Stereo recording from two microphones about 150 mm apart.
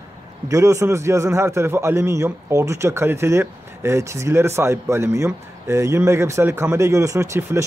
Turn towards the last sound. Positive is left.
turn(degrees=-20)  # may be behind; listen again after turning